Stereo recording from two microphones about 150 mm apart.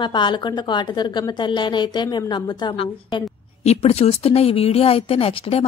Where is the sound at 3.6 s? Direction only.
45° left (ahead or behind).